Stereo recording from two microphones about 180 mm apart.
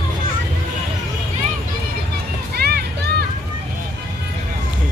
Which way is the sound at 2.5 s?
60° right (ahead or behind).